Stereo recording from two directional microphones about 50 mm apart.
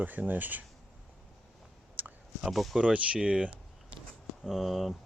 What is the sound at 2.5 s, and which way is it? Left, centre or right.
Speech, centre.